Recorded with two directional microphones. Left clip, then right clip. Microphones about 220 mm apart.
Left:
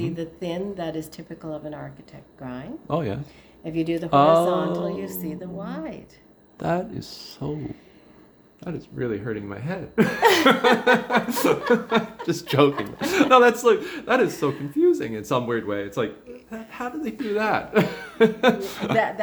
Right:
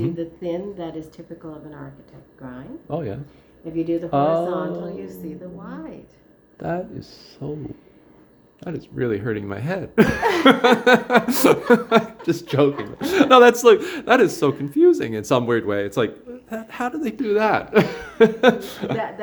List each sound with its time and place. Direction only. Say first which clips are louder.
0.0 s a woman's voice: right 3 dB; 50° left (ahead or behind)
2.8 s speech: left 2 dB; 5° left (ahead or behind)
3.6 s a woman's voice: right 2 dB; 50° left (ahead or behind)
4.1 s speech: left 4 dB; 5° left (ahead or behind)
4.4 s a woman's voice: left 2 dB; 50° left (ahead or behind)
6.6 s speech: left 1 dB; 5° left (ahead or behind)
8.6 s speech: right 4 dB; 20° right (ahead or behind)
12.2 s a man's voice: right 4 dB; 15° right (ahead or behind)
12.5 s speech: even; 5° right (ahead or behind)
13.0 s speech: right 4 dB; 15° right (ahead or behind)
18.7 s speech: even; 10° right (ahead or behind)